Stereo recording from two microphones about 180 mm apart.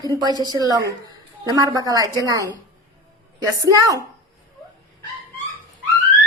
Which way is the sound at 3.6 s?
15° right (ahead or behind).